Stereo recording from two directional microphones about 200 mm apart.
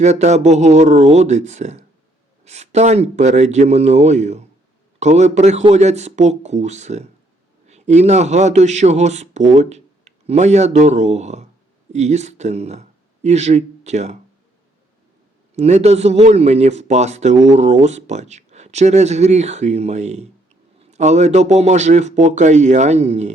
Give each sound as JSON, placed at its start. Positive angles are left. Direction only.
{"t": 0.0, "sound": "speech", "side_deg": -35}
{"t": 15.5, "sound": "speech", "side_deg": -35}